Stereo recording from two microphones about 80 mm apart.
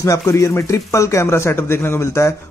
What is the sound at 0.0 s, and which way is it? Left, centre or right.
Speech, left.